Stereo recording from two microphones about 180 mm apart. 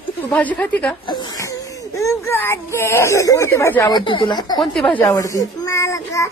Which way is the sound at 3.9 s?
25° left (ahead or behind).